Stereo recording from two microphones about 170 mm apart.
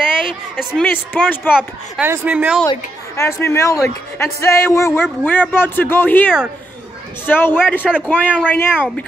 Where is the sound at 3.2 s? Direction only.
15° left (ahead or behind).